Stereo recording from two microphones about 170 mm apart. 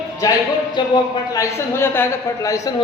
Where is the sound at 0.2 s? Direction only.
20° left (ahead or behind).